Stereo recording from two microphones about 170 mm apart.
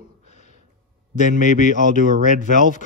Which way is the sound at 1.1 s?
45° left (ahead or behind).